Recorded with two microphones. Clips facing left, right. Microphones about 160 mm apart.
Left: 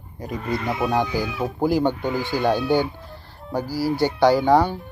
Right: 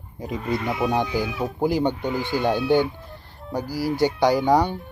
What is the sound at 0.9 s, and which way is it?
Speech, 20° right (ahead or behind).